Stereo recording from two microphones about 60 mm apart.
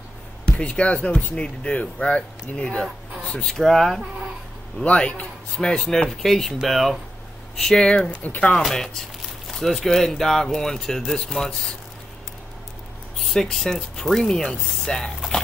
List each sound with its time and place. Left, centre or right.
0.5 s speech: centre
3.4 s speech: centre
4.8 s speech: left
5.6 s speech: centre
7.6 s speech: centre
8.5 s speech: centre
13.2 s speech: centre